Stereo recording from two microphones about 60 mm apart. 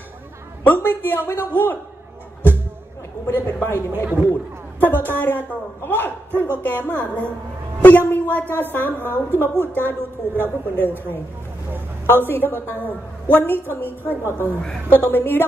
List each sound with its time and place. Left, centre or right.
0.7 s a woman's voice: left
3.3 s a woman's voice: left
4.7 s a woman's voice: left
12.1 s a woman's voice: left
14.2 s a woman's voice: right
14.9 s a woman's voice: left